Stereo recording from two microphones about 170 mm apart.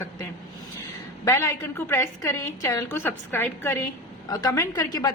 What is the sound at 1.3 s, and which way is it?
A woman's voice, 15° left (ahead or behind).